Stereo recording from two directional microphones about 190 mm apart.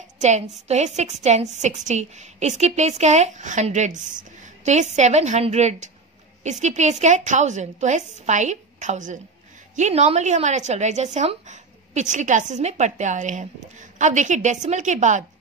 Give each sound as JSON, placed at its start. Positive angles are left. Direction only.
{"t": 0.2, "sound": "a woman's voice", "side_deg": -35}